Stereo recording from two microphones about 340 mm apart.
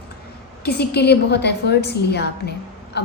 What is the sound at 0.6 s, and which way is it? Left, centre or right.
A woman's voice, left.